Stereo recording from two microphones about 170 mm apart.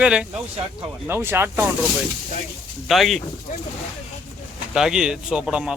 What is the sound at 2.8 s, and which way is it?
Speech, centre (ahead or behind).